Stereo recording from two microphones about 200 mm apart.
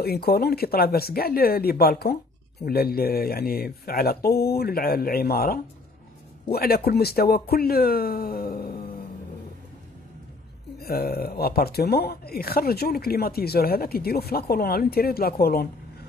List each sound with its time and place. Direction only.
0.0 s speech: 50° left (ahead or behind)
10.8 s speech: 50° left (ahead or behind)